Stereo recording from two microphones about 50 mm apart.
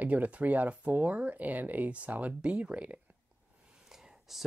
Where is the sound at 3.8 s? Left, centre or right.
Centre.